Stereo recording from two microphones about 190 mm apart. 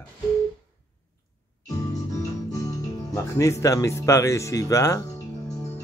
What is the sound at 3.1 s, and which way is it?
Speech, 15° left (ahead or behind).